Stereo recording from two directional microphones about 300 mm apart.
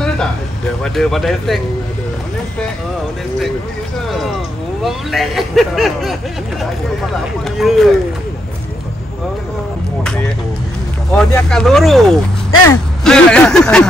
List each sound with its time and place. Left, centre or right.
0.9 s speech: centre
4.8 s speech: centre
7.5 s speech: centre
11.1 s speech: centre